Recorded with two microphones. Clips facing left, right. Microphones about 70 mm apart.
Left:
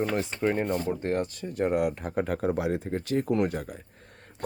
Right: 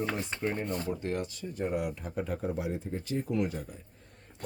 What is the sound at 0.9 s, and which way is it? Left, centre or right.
Speech, left.